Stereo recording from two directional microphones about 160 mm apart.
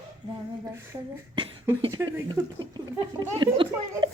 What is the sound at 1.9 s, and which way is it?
Speech, 25° right (ahead or behind).